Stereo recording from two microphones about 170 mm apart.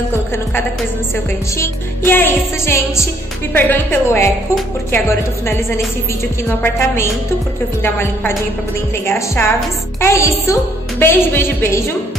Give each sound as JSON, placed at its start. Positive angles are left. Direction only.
{"t": 1.6, "sound": "a woman's voice", "side_deg": 10}
{"t": 6.6, "sound": "a woman's voice", "side_deg": 15}